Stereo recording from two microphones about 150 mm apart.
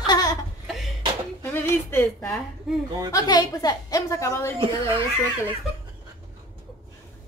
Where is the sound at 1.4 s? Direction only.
15° left (ahead or behind).